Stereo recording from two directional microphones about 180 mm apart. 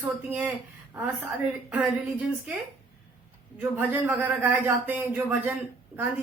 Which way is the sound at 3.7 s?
10° right (ahead or behind).